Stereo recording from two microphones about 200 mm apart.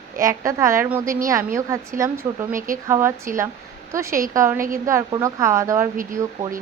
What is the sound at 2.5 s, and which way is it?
Speech, 40° right (ahead or behind).